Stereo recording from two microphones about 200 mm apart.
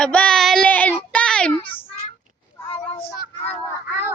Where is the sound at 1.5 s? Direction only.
25° left (ahead or behind).